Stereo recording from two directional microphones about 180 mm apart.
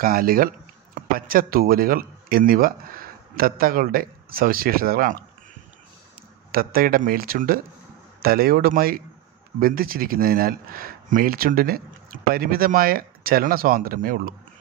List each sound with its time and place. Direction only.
0.0 s speech: 55° right (ahead or behind)
6.5 s speech: 55° right (ahead or behind)